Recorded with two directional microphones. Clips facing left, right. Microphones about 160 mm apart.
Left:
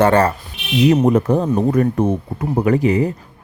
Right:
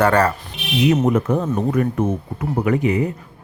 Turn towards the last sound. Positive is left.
turn(degrees=35)  # may be behind; listen again after turning